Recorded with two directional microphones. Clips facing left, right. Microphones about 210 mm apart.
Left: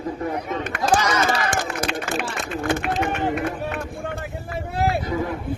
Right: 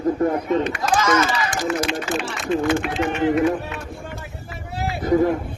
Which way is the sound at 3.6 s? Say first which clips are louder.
Left 4 dB; 55° left (ahead or behind).